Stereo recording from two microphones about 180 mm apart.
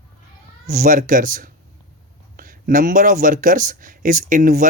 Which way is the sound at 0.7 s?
45° right (ahead or behind).